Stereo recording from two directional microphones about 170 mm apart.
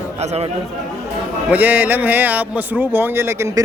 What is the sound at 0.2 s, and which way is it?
Speech, 40° right (ahead or behind).